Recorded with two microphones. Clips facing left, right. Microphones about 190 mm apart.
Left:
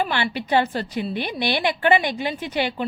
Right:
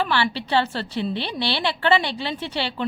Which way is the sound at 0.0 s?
15° left (ahead or behind).